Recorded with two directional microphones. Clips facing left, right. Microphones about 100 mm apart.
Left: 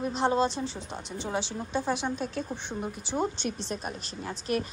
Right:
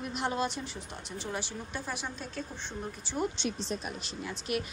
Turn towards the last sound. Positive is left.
turn(degrees=40)  # may be behind; listen again after turning